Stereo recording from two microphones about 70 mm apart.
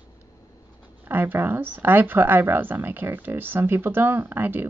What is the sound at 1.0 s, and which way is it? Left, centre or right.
Speech, right.